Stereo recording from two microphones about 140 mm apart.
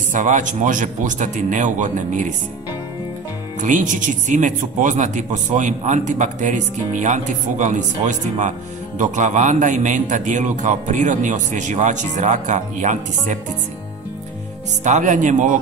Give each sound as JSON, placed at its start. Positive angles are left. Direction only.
{"t": 0.1, "sound": "speech", "side_deg": -65}
{"t": 3.6, "sound": "speech", "side_deg": -65}
{"t": 14.8, "sound": "speech", "side_deg": -60}